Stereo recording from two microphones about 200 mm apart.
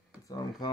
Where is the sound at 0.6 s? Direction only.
20° left (ahead or behind).